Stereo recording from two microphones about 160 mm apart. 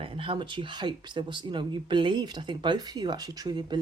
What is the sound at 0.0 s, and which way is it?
Speech, 35° right (ahead or behind).